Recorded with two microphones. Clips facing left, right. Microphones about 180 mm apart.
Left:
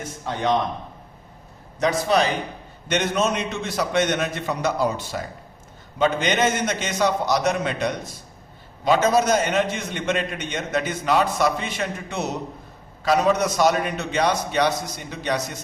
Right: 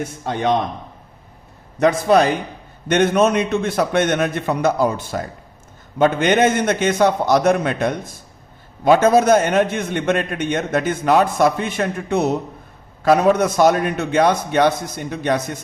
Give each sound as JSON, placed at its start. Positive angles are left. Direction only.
{"t": 1.8, "sound": "a man's voice", "side_deg": -55}